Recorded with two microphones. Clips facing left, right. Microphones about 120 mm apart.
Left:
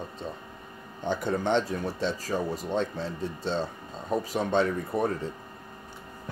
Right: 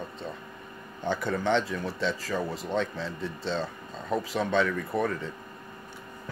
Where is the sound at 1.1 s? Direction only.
45° left (ahead or behind).